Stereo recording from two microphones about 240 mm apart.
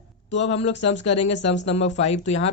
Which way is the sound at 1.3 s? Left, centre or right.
Left.